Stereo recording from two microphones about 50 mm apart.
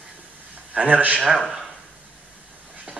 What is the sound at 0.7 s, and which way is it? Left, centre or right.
Speech, right.